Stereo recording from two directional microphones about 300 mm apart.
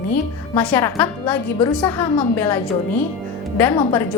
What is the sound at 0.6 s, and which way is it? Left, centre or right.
A woman's voice, centre.